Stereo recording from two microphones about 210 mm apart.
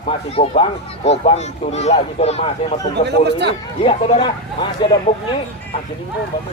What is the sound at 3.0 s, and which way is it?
Speech, 55° right (ahead or behind).